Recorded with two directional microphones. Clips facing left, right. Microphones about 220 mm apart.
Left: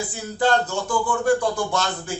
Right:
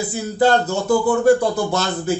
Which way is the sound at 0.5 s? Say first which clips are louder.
Right 4 dB; 40° right (ahead or behind).